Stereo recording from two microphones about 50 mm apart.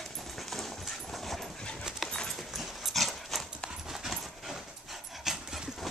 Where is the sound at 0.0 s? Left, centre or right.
Centre.